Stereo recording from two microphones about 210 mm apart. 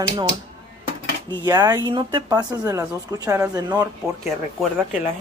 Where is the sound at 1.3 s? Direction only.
20° right (ahead or behind).